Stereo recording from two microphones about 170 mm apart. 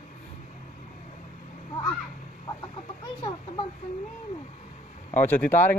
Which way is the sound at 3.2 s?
30° left (ahead or behind).